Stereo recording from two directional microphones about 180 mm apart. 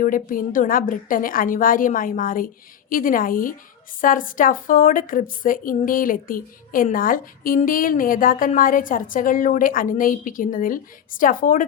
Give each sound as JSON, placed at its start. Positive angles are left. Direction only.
{"t": 0.0, "sound": "a woman's voice", "side_deg": 50}